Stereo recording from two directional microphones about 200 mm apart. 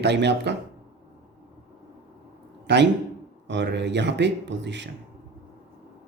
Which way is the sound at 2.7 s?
60° right (ahead or behind).